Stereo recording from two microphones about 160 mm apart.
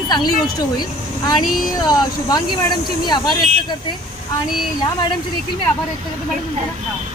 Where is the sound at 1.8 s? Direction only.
25° left (ahead or behind).